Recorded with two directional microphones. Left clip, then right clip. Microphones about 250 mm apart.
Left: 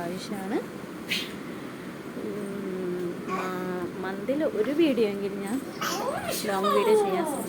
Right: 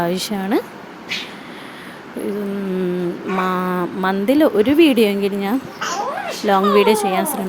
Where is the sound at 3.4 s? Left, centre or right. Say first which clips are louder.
Right 12 dB; right.